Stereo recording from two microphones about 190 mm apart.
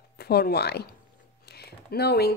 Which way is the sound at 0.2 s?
55° left (ahead or behind).